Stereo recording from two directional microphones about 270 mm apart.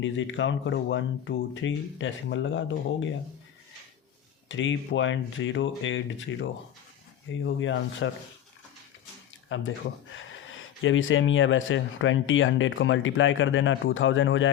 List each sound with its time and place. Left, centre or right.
0.0 s speech: left
4.4 s speech: left
9.5 s speech: left